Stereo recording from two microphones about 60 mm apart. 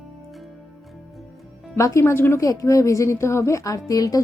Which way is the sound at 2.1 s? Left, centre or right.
Left.